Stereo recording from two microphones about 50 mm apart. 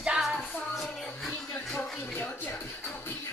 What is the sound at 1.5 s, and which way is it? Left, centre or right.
Music, left.